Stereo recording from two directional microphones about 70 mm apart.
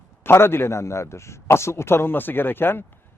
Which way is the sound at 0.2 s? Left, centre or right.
Left.